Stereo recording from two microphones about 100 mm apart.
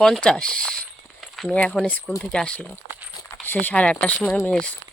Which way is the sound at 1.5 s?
15° left (ahead or behind).